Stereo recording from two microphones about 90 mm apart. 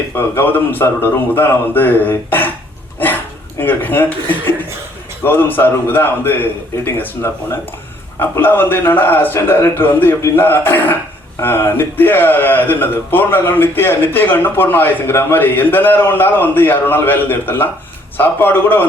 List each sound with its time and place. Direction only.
0.2 s a man's voice: 25° left (ahead or behind)
3.6 s a man's voice: 20° left (ahead or behind)